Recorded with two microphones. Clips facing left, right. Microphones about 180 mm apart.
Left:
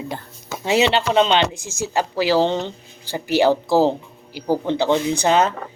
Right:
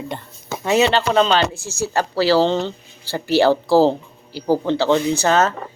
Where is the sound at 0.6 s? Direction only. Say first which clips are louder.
Right 1 dB; 25° left (ahead or behind).